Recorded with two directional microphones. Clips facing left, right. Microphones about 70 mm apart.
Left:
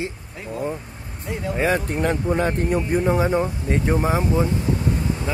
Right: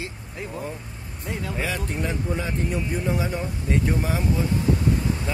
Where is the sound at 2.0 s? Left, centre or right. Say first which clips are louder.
Left 9 dB; left.